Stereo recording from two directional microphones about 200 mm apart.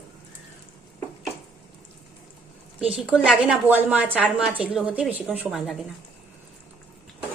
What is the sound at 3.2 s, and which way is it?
A woman's voice, 5° right (ahead or behind).